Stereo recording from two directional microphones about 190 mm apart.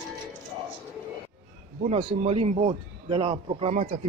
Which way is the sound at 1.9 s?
30° right (ahead or behind).